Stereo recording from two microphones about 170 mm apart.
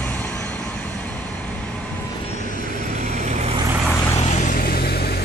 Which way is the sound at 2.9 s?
45° right (ahead or behind).